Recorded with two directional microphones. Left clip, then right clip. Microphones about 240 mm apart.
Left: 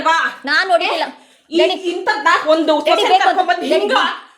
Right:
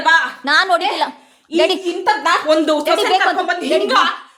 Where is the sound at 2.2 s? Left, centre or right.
Right.